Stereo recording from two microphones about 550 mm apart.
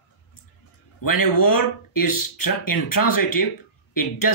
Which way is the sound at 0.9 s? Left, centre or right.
Left.